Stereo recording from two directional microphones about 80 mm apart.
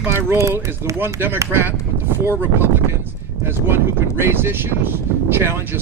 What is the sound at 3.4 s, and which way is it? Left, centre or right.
Speech, right.